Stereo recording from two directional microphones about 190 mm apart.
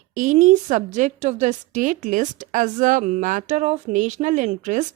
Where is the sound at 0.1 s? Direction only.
45° right (ahead or behind).